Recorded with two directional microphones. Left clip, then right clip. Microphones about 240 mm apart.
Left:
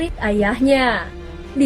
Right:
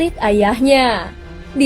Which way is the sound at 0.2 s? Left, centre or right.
Right.